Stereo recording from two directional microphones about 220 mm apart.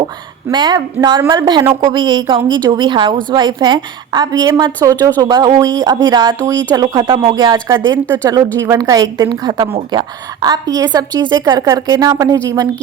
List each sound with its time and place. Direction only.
0.4 s a woman's voice: 20° right (ahead or behind)